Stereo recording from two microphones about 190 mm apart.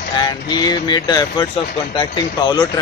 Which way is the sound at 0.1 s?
20° left (ahead or behind).